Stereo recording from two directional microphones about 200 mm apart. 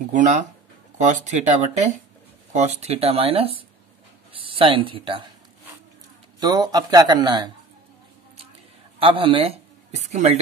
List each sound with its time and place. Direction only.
0.1 s speech: 40° right (ahead or behind)
6.4 s speech: 20° right (ahead or behind)
9.0 s speech: 25° right (ahead or behind)